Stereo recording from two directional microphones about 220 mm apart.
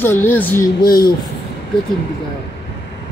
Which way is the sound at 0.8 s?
40° left (ahead or behind).